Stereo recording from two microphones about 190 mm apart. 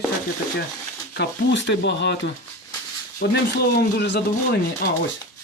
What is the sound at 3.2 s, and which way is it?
Speech, 60° left (ahead or behind).